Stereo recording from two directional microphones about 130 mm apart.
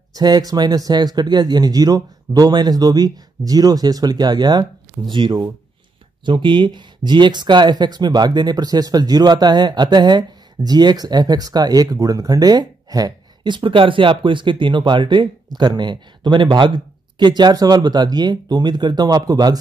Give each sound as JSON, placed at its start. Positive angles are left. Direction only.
{"t": 0.1, "sound": "speech", "side_deg": -30}